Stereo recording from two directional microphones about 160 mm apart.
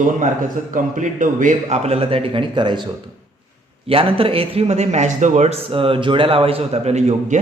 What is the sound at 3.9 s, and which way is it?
A man's voice, 35° right (ahead or behind).